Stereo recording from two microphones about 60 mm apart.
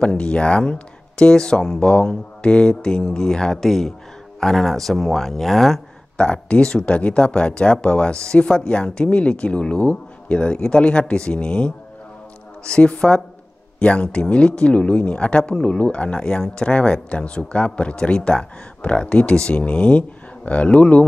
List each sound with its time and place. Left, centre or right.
0.0 s speech: centre
6.1 s speech: centre